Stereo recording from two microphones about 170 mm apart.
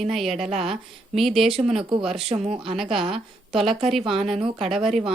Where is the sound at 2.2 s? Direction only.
40° right (ahead or behind).